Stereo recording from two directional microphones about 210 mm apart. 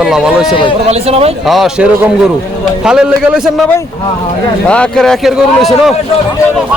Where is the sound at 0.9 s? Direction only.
30° right (ahead or behind).